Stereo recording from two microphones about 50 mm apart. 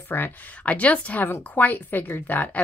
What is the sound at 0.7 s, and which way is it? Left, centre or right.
Speech, left.